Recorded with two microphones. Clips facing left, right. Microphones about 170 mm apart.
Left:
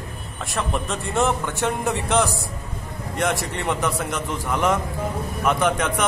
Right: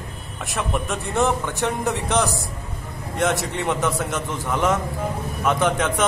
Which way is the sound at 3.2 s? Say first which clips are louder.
Right 2 dB; centre (ahead or behind).